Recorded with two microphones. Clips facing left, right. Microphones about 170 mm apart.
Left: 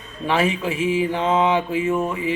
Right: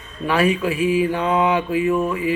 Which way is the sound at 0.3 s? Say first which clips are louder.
Right 2 dB; 25° left (ahead or behind).